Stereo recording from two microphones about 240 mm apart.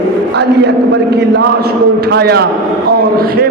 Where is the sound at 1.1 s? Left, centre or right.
Right.